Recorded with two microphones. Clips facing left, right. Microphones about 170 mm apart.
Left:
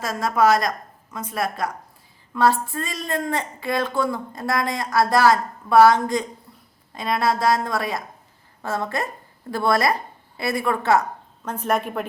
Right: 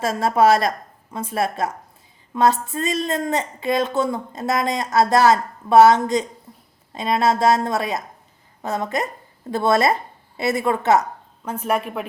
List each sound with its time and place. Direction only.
0.0 s a woman's voice: 25° right (ahead or behind)
11.4 s a woman's voice: 5° right (ahead or behind)